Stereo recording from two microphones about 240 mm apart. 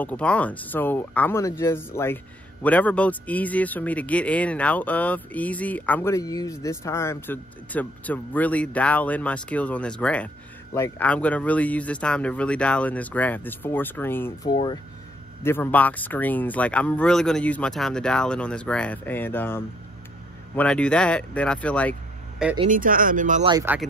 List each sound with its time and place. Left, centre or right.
0.0 s speech: centre
15.4 s speech: centre
22.7 s speech: right
23.5 s speech: centre